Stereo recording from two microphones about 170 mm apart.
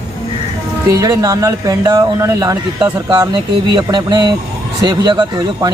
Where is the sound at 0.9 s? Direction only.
20° right (ahead or behind).